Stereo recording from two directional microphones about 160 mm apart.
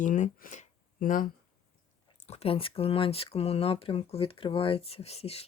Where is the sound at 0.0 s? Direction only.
55° left (ahead or behind).